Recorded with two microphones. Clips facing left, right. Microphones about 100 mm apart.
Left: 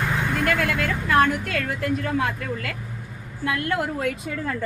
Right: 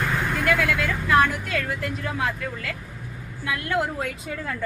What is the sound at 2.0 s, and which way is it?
Speech, 50° left (ahead or behind).